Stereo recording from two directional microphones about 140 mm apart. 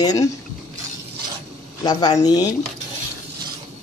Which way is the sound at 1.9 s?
30° left (ahead or behind).